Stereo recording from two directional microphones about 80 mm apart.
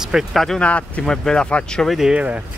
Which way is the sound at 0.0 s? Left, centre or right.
Centre.